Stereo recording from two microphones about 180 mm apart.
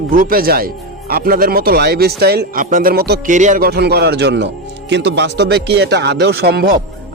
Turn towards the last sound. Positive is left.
turn(degrees=-60)  # may be behind; listen again after turning